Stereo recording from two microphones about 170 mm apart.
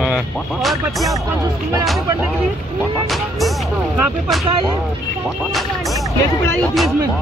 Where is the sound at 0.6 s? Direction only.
Centre (ahead or behind).